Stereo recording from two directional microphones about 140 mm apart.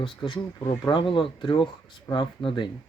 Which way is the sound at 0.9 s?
35° left (ahead or behind).